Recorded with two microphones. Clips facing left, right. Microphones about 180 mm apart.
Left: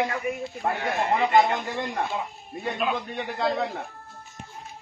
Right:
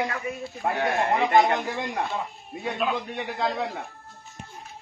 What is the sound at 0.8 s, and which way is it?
Speech, 60° right (ahead or behind).